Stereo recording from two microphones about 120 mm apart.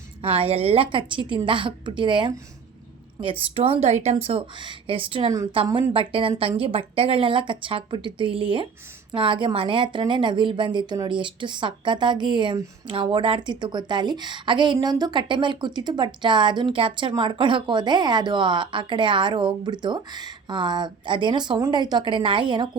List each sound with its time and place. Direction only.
0.2 s speech: 50° right (ahead or behind)
3.4 s a woman's voice: 50° right (ahead or behind)